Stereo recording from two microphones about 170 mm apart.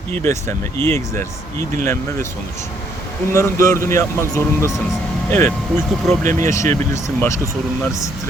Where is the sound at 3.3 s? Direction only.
15° left (ahead or behind).